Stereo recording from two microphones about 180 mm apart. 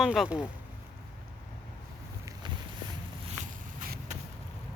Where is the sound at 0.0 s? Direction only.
Centre (ahead or behind).